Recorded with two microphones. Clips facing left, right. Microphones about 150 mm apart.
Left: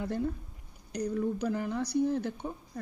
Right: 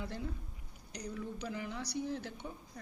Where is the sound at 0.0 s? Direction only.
50° left (ahead or behind).